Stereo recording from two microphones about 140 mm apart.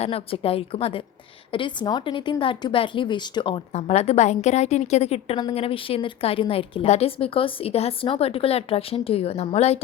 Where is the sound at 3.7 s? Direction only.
50° left (ahead or behind).